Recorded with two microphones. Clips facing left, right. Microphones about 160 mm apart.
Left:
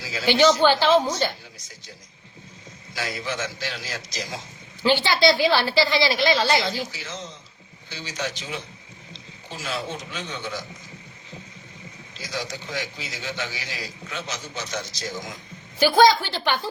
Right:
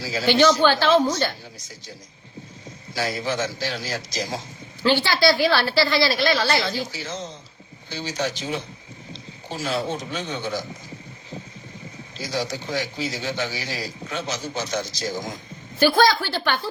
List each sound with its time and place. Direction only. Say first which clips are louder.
0.0 s a man's voice: right 5 dB; 35° right (ahead or behind)
0.3 s a woman's voice: even; 15° left (ahead or behind)
2.9 s a man's voice: right 4 dB; 35° right (ahead or behind)
4.8 s a woman's voice: even; 15° left (ahead or behind)
6.9 s a man's voice: right 4 dB; 35° right (ahead or behind)
12.1 s a man's voice: right 5 dB; 35° right (ahead or behind)
15.8 s a woman's voice: left 1 dB; 15° left (ahead or behind)